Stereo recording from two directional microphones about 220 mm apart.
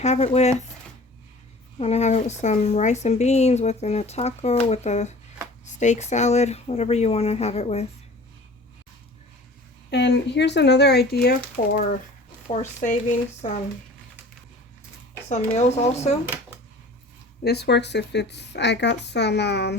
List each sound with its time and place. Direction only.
0.0 s speech: 30° left (ahead or behind)
1.8 s a woman's voice: 30° left (ahead or behind)
9.9 s a woman's voice: 50° left (ahead or behind); by 13.5 s 35° left (ahead or behind)
15.5 s a woman's voice: 30° left (ahead or behind)
17.4 s a woman's voice: 50° left (ahead or behind)